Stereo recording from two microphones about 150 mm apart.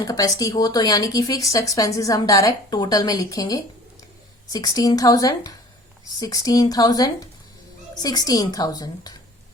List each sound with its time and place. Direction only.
0.0 s speech: 25° left (ahead or behind)